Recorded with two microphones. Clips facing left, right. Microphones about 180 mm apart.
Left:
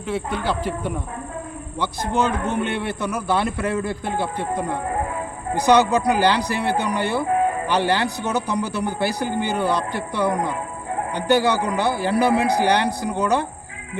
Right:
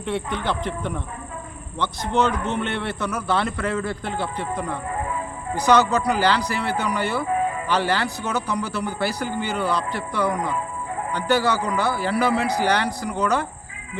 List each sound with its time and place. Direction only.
0.1 s a man's voice: 5° left (ahead or behind)
5.6 s a man's voice: 15° left (ahead or behind)